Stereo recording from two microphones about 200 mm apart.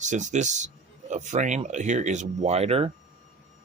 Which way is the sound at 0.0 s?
35° right (ahead or behind).